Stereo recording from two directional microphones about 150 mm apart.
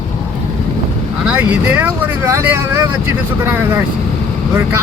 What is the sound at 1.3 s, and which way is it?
Speech, 10° right (ahead or behind).